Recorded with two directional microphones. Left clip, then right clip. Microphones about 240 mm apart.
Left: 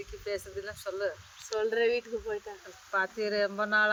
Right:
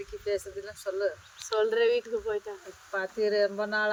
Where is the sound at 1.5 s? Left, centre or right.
Centre.